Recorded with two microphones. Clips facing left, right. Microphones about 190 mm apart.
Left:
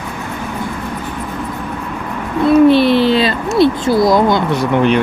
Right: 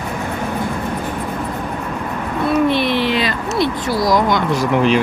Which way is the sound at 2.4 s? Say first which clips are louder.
Left 8 dB; 30° left (ahead or behind).